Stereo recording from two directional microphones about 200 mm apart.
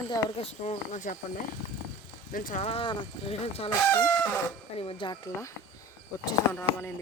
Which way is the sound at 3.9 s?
10° left (ahead or behind).